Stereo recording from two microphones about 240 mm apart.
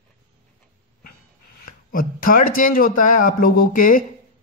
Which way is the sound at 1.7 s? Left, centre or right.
Left.